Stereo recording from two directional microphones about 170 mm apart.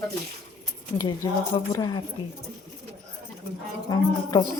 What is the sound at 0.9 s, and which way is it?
Speech, 20° left (ahead or behind).